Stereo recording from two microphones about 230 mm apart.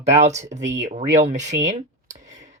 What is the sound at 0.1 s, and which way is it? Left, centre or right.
Speech, right.